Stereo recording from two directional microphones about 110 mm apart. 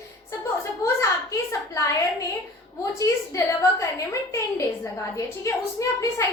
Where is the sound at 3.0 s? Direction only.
30° left (ahead or behind).